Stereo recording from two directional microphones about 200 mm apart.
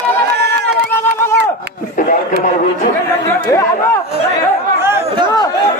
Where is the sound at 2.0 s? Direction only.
40° left (ahead or behind).